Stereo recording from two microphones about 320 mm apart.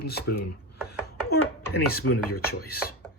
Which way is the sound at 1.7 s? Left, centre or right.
Left.